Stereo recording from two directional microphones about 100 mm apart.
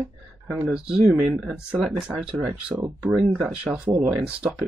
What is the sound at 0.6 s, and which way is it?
Speech, 5° right (ahead or behind).